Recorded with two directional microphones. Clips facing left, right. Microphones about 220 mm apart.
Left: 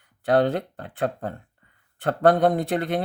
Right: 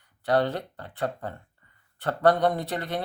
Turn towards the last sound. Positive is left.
turn(degrees=50)  # may be behind; listen again after turning